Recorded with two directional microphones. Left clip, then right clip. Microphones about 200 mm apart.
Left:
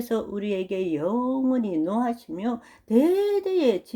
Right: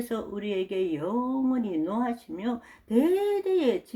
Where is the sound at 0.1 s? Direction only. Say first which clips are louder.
Left 6 dB; 40° left (ahead or behind).